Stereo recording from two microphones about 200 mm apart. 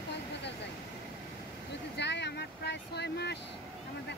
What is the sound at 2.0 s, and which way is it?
Vehicle, 60° left (ahead or behind).